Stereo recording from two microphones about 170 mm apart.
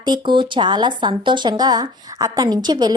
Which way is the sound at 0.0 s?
25° right (ahead or behind).